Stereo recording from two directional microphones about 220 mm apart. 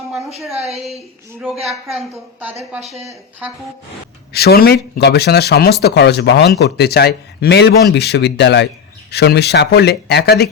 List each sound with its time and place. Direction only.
1.6 s a woman's voice: centre (ahead or behind)
4.3 s speech: 45° left (ahead or behind)